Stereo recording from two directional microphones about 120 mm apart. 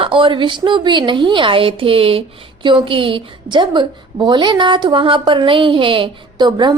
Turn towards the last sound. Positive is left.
turn(degrees=-40)  # may be behind; listen again after turning